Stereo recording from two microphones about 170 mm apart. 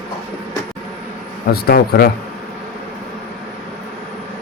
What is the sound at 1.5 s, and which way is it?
Speech, 65° left (ahead or behind).